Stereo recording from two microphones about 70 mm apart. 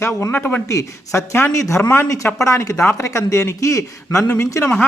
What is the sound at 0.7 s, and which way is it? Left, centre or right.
A man's voice, left.